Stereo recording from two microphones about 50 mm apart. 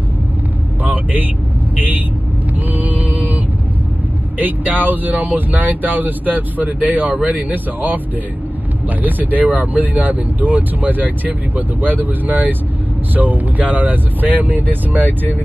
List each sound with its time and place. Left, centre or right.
0.8 s vehicle: right
1.8 s speech: right
2.7 s a sound: right
4.4 s speech: right
9.0 s speech: right